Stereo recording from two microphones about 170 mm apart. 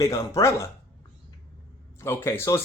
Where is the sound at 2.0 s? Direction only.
15° left (ahead or behind).